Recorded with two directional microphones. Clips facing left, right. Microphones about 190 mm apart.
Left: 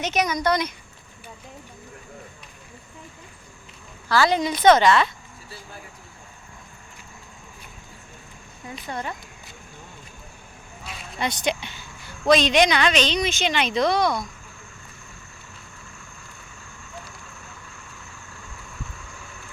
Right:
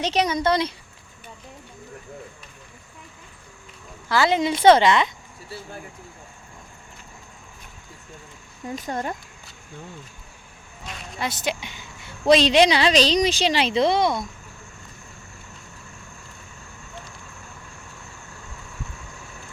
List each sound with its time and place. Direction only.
0.0 s a woman's voice: 30° right (ahead or behind)
4.1 s a woman's voice: 20° right (ahead or behind)
8.7 s speech: 45° right (ahead or behind)
10.8 s speech: centre (ahead or behind)
12.0 s a woman's voice: 30° right (ahead or behind)